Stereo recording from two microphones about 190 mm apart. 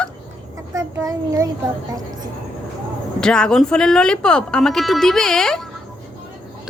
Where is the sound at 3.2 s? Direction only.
5° left (ahead or behind).